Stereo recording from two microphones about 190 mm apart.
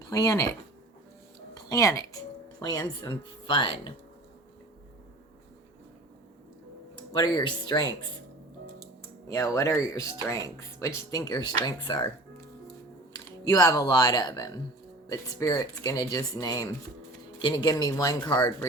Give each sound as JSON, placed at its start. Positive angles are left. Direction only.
{"t": 0.0, "sound": "speech", "side_deg": 20}
{"t": 1.7, "sound": "speech", "side_deg": 15}
{"t": 7.2, "sound": "speech", "side_deg": 25}
{"t": 9.3, "sound": "speech", "side_deg": 15}
{"t": 13.1, "sound": "speech", "side_deg": 20}